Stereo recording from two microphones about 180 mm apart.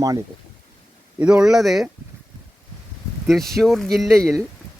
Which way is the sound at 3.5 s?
Centre (ahead or behind).